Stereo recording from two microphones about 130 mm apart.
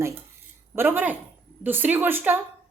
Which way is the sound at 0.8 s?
15° right (ahead or behind).